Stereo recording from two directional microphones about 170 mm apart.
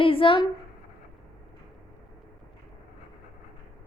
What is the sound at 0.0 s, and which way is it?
Speech, 30° left (ahead or behind).